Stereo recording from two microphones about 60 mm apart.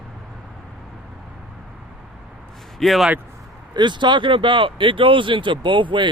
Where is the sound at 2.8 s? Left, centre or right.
Centre.